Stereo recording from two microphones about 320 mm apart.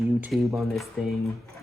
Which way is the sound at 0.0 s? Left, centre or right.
Centre.